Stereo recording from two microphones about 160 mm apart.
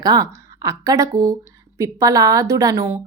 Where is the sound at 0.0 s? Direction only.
25° right (ahead or behind).